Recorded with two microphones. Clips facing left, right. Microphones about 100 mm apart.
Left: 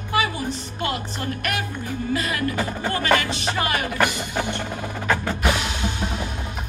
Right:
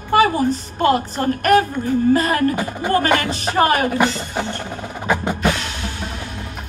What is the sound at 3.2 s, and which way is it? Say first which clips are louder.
Speech: right 7 dB; 40° right (ahead or behind).